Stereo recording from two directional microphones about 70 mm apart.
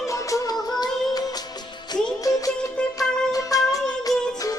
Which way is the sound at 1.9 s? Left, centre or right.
Left.